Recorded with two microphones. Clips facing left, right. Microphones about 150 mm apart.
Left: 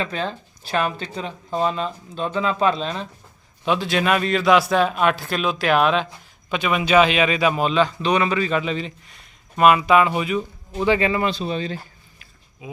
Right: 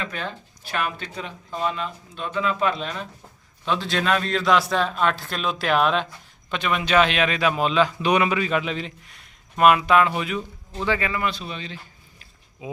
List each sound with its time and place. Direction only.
0.0 s speech: 30° left (ahead or behind)
3.7 s a man's voice: 10° left (ahead or behind)
10.8 s speech: 25° left (ahead or behind); by 11.8 s 40° left (ahead or behind)